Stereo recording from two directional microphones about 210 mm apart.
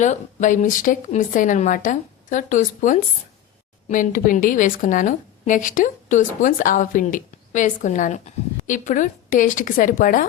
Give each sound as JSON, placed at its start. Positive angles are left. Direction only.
{"t": 0.0, "sound": "a woman's voice", "side_deg": 35}